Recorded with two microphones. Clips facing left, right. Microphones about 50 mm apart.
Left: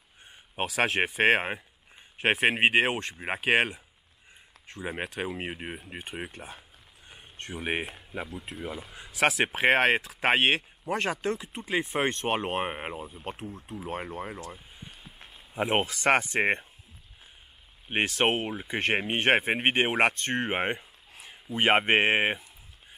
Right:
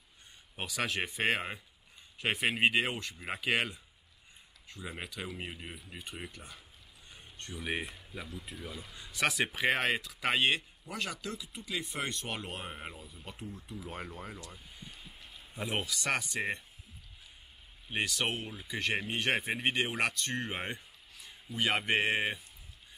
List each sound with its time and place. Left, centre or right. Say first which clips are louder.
0.6 s speech: left 8 dB; left
2.9 s speech: left 7 dB; left
3.2 s speech: left 7 dB; left
17.8 s speech: left 8 dB; left